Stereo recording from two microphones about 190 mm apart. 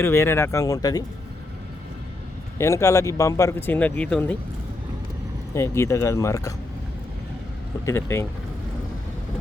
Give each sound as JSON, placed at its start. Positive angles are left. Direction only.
{"t": 0.0, "sound": "speech", "side_deg": 15}
{"t": 2.6, "sound": "speech", "side_deg": 15}
{"t": 5.5, "sound": "speech", "side_deg": 15}
{"t": 7.9, "sound": "speech", "side_deg": 15}